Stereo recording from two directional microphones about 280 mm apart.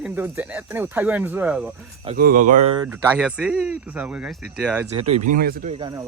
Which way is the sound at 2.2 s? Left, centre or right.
Right.